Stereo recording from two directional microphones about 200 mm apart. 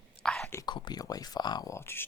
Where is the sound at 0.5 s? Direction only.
20° left (ahead or behind).